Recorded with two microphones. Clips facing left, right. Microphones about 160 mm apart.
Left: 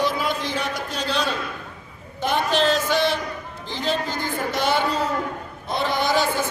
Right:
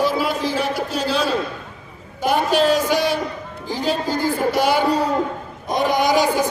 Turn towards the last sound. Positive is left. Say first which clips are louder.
# right 4 dB
turn(degrees=-15)  # may be behind; listen again after turning